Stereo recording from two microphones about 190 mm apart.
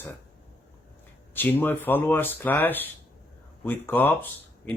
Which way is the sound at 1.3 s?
10° left (ahead or behind).